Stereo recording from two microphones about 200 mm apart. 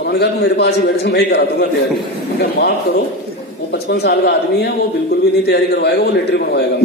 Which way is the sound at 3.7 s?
55° left (ahead or behind).